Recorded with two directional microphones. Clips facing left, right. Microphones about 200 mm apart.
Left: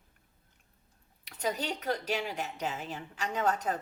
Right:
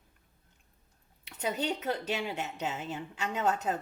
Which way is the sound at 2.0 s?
20° right (ahead or behind).